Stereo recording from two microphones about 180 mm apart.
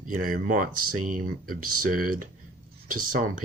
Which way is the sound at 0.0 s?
50° right (ahead or behind).